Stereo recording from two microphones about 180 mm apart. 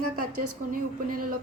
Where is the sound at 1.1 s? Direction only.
50° right (ahead or behind).